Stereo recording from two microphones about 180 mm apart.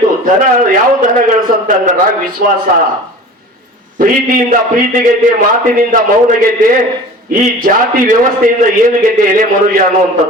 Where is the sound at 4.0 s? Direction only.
50° right (ahead or behind).